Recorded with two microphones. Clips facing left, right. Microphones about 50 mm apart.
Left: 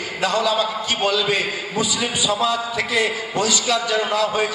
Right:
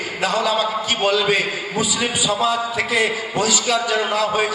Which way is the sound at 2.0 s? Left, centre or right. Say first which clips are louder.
Right 1 dB; centre.